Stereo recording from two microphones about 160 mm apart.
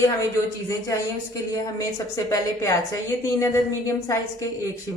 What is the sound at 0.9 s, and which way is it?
A woman's voice, 20° left (ahead or behind).